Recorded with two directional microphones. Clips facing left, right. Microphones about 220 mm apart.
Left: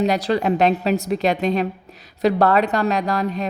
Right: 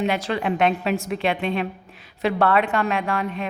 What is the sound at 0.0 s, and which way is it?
Speech, 35° left (ahead or behind).